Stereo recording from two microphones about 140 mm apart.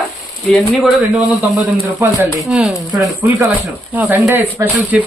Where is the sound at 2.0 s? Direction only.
15° right (ahead or behind).